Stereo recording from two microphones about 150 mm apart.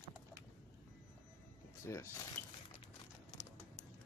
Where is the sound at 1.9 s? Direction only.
15° left (ahead or behind).